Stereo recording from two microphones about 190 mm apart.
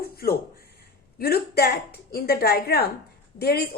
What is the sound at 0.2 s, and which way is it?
A woman's voice, 50° left (ahead or behind).